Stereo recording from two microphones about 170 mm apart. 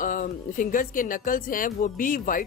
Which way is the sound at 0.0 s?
50° left (ahead or behind).